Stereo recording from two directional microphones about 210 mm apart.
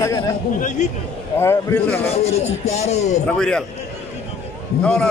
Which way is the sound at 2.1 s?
30° left (ahead or behind).